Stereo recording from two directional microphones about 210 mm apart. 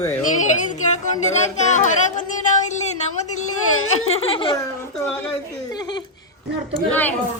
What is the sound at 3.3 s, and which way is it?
Speech, 90° left.